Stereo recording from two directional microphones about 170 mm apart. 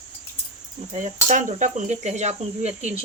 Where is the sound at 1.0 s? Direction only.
45° right (ahead or behind).